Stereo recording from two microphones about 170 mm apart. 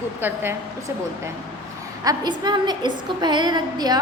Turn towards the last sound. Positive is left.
turn(degrees=-25)  # may be behind; listen again after turning